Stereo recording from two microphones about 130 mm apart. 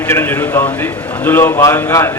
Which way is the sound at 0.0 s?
15° left (ahead or behind).